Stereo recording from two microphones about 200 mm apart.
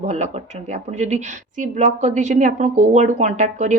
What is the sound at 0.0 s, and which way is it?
A woman's voice, 35° right (ahead or behind).